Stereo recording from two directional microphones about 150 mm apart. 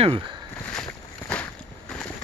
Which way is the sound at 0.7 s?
5° left (ahead or behind).